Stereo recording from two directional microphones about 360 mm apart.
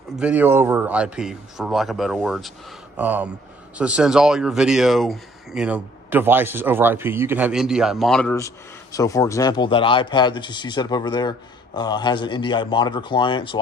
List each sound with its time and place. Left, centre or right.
0.2 s a man's voice: centre